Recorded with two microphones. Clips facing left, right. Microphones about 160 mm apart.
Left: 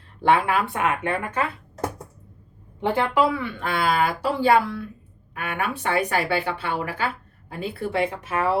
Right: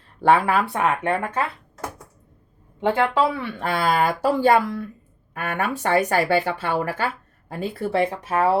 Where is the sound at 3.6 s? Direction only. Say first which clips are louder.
Right 2 dB; 40° right (ahead or behind).